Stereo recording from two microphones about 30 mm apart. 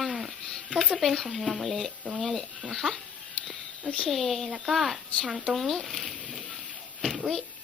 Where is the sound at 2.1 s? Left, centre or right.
Centre.